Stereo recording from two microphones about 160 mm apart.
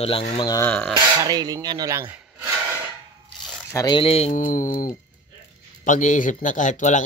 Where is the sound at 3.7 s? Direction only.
20° left (ahead or behind).